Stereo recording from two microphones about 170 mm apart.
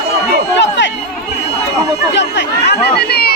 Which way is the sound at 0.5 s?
90° left.